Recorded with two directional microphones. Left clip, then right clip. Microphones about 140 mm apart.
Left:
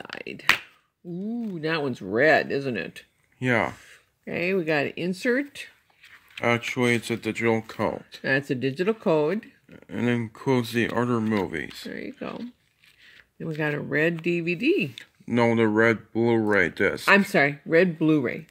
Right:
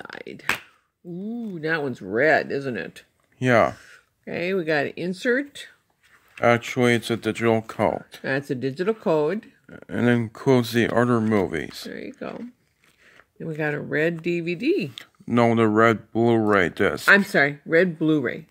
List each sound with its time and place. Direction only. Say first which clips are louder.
0.2 s speech: left 4 dB; 15° left (ahead or behind)
3.3 s speech: right 6 dB; 90° right
3.7 s speech: right 2 dB; 15° left (ahead or behind)
6.4 s speech: right 4 dB; 90° right; by 8.2 s 65° right (ahead or behind)
8.2 s speech: left 1 dB; 15° left (ahead or behind)
9.7 s speech: right 5 dB; 90° right
11.9 s speech: right 1 dB; 15° left (ahead or behind)
13.6 s speech: right 1 dB; 15° left (ahead or behind)
15.0 s speech: right 3 dB; 70° right (ahead or behind); by 17.0 s 90° right
17.0 s speech: right 3 dB; 15° left (ahead or behind)